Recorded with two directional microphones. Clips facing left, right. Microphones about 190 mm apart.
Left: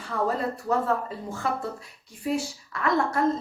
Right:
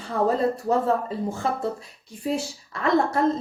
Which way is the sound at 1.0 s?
25° right (ahead or behind).